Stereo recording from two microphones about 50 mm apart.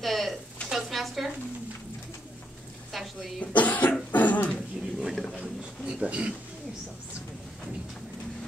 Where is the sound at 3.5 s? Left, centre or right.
Left.